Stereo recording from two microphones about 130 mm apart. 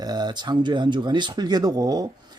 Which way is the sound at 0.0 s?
30° right (ahead or behind).